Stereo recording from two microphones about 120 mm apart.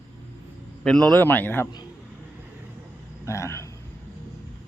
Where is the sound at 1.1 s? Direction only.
15° left (ahead or behind).